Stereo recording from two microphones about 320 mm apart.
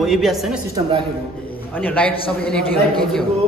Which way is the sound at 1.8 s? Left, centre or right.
Centre.